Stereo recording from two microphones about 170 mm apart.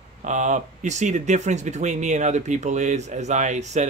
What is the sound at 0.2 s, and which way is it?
Speech, 45° right (ahead or behind).